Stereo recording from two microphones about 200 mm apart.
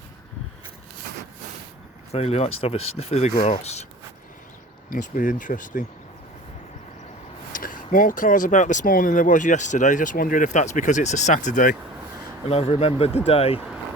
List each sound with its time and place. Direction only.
2.1 s speech: 30° left (ahead or behind)
4.9 s speech: 45° left (ahead or behind)
7.5 s speech: 45° left (ahead or behind)
12.5 s speech: 30° left (ahead or behind)